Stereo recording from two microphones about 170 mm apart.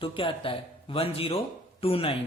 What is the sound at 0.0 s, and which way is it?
Speech, 30° left (ahead or behind).